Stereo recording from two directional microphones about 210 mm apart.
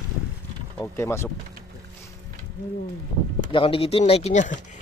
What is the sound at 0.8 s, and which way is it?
Speech, 15° left (ahead or behind).